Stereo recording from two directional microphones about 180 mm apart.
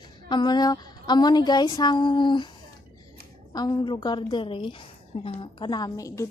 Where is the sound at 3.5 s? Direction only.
25° left (ahead or behind).